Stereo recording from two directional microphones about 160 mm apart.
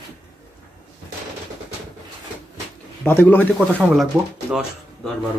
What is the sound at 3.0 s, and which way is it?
Speech, 15° left (ahead or behind).